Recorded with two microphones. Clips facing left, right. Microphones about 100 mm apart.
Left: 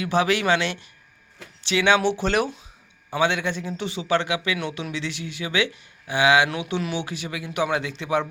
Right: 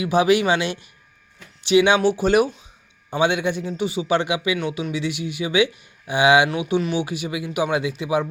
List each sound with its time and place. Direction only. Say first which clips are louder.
0.0 s speech: right 4 dB; 15° right (ahead or behind)